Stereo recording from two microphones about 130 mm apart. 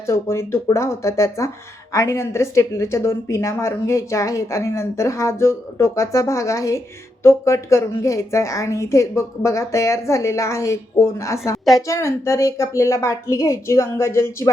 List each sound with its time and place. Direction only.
0.1 s a woman's voice: 20° left (ahead or behind)